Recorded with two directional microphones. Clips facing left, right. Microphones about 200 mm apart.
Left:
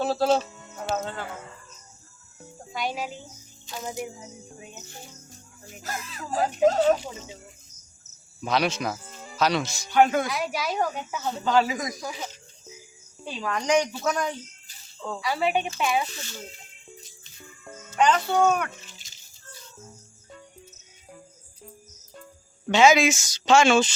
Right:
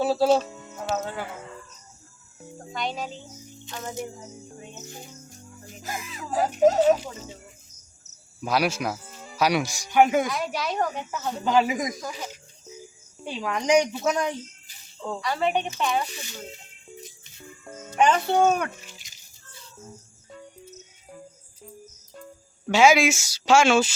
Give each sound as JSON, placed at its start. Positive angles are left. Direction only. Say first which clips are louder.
{"t": 0.0, "sound": "speech", "louder": "right 2 dB", "side_deg": -5}
{"t": 2.7, "sound": "speech", "louder": "left 1 dB", "side_deg": 5}
{"t": 5.9, "sound": "speech", "louder": "right 1 dB", "side_deg": -15}
{"t": 6.5, "sound": "speech", "louder": "right 2 dB", "side_deg": -5}
{"t": 8.4, "sound": "speech", "louder": "right 1 dB", "side_deg": -5}
{"t": 10.2, "sound": "speech", "louder": "even", "side_deg": 5}
{"t": 11.3, "sound": "speech", "louder": "right 1 dB", "side_deg": -15}
{"t": 11.9, "sound": "speech", "louder": "even", "side_deg": 0}
{"t": 13.2, "sound": "speech", "louder": "right 2 dB", "side_deg": -15}
{"t": 15.2, "sound": "speech", "louder": "even", "side_deg": 5}
{"t": 16.1, "sound": "speech", "louder": "right 1 dB", "side_deg": -15}
{"t": 17.9, "sound": "speech", "louder": "right 1 dB", "side_deg": -25}
{"t": 19.1, "sound": "a sound", "louder": "even", "side_deg": -20}
{"t": 22.7, "sound": "speech", "louder": "even", "side_deg": -10}